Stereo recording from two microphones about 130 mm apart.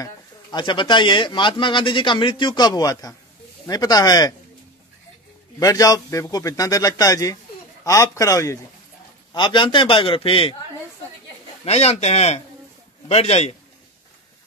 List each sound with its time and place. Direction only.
0.0 s a man's voice: 35° left (ahead or behind)
5.6 s a man's voice: 25° left (ahead or behind)
9.3 s a man's voice: 40° left (ahead or behind)
11.6 s a man's voice: 55° left (ahead or behind)